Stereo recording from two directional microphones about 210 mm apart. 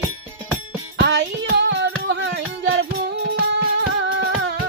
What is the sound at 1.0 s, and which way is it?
Child singing, 55° right (ahead or behind).